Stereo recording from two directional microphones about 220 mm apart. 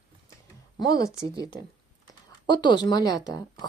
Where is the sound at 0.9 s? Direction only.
15° left (ahead or behind).